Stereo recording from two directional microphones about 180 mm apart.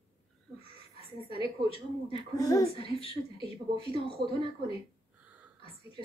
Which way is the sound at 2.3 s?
20° left (ahead or behind).